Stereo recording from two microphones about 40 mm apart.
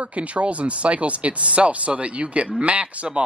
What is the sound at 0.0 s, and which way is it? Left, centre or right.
Speech, right.